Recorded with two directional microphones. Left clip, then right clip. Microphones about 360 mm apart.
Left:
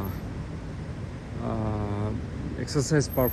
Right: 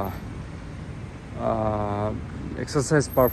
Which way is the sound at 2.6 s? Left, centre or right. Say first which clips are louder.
Right 4 dB; centre.